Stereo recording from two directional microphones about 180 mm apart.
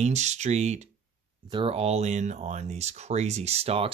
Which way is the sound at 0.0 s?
40° right (ahead or behind).